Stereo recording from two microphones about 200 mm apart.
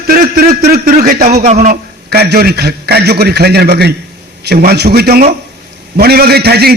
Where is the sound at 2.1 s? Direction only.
55° right (ahead or behind).